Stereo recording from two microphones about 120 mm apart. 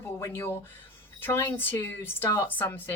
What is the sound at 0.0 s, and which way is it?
A woman's voice, 20° left (ahead or behind).